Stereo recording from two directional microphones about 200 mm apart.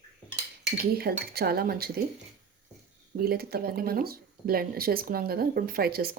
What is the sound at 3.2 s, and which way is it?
Speech, 50° right (ahead or behind).